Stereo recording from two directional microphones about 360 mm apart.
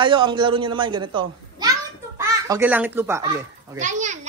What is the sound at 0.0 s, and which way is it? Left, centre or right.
A child's voice, centre.